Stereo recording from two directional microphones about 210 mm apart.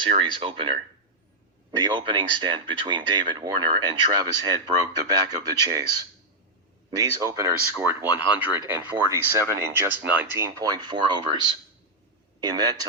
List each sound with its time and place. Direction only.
0.0 s speech: 25° right (ahead or behind)
1.8 s speech: 25° right (ahead or behind)
6.9 s speech: 15° right (ahead or behind)
12.4 s speech: 20° right (ahead or behind)